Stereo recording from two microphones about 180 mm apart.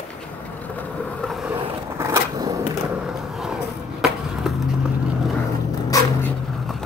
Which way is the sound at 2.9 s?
5° right (ahead or behind).